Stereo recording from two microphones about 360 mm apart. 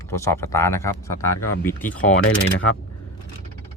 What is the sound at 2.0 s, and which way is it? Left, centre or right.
Speech, left.